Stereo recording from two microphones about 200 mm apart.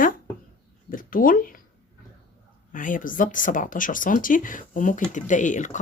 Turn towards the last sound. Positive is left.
turn(degrees=40)  # may be behind; listen again after turning